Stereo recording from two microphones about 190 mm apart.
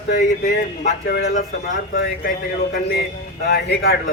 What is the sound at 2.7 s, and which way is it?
Speech, 55° left (ahead or behind).